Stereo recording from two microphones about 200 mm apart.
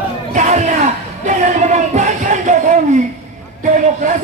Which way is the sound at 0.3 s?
35° right (ahead or behind).